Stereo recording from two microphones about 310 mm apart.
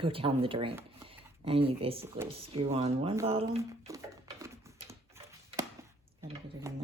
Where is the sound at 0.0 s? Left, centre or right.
Centre.